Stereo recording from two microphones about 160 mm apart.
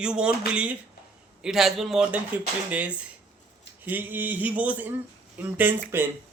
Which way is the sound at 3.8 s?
10° right (ahead or behind).